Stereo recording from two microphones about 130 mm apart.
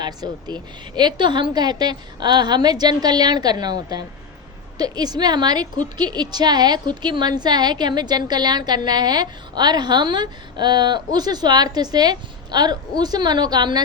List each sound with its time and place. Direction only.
0.0 s a woman's voice: 35° right (ahead or behind)